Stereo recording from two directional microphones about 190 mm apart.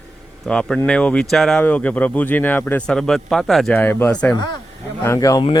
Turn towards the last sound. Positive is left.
turn(degrees=20)  # may be behind; listen again after turning